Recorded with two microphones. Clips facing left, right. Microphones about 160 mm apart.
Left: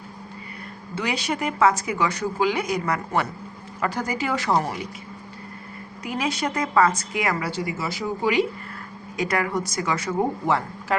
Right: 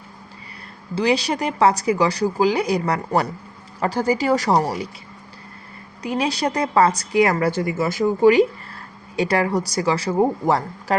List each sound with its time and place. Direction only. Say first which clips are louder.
0.9 s speech: right 7 dB; 35° right (ahead or behind)
6.0 s speech: right 4 dB; 35° right (ahead or behind)
9.1 s speech: right 5 dB; 30° right (ahead or behind)